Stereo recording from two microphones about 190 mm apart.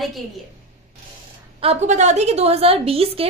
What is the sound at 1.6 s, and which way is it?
A woman's voice, 35° right (ahead or behind).